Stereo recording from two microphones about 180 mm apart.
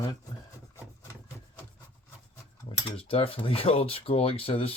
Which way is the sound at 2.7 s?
30° left (ahead or behind).